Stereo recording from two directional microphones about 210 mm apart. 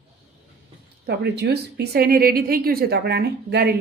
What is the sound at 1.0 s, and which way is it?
A woman's voice, 50° right (ahead or behind).